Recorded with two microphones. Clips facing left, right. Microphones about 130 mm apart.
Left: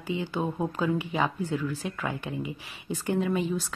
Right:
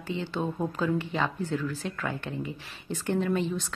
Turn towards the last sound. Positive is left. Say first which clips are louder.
# left 1 dB
turn(degrees=5)  # may be behind; listen again after turning